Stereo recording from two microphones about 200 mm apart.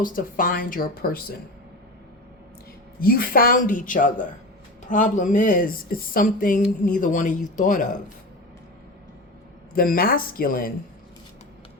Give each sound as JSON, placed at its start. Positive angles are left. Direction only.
{"t": 0.0, "sound": "speech", "side_deg": 45}
{"t": 3.0, "sound": "speech", "side_deg": 45}
{"t": 9.7, "sound": "speech", "side_deg": 45}